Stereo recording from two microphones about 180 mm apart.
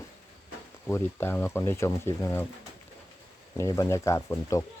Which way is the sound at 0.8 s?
15° left (ahead or behind).